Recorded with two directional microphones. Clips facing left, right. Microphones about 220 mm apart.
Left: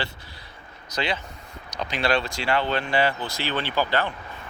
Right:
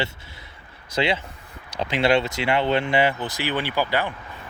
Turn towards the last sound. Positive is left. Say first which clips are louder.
# right 1 dB
turn(degrees=-10)  # may be behind; listen again after turning